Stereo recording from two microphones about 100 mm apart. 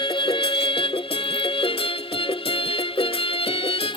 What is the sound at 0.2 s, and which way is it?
Music, 60° left (ahead or behind).